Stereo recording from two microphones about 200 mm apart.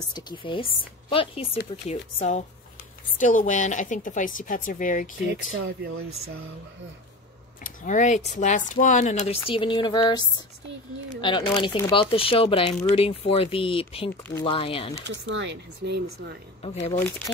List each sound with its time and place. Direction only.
0.1 s speech: 25° left (ahead or behind); by 5.1 s 40° left (ahead or behind)
5.3 s speech: 55° right (ahead or behind)
7.6 s speech: 40° left (ahead or behind)
15.0 s speech: 65° right (ahead or behind)
16.6 s speech: 30° left (ahead or behind)